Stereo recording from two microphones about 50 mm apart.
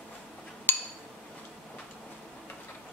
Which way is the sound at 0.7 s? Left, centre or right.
Left.